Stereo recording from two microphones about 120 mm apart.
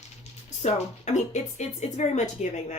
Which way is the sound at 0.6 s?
70° left (ahead or behind).